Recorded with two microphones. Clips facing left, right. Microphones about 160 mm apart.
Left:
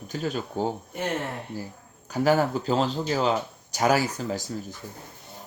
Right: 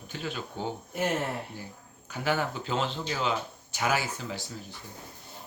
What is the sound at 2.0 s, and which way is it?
Speech, 40° left (ahead or behind).